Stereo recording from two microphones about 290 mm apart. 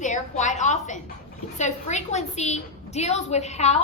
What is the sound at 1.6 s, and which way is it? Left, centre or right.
A woman's voice, left.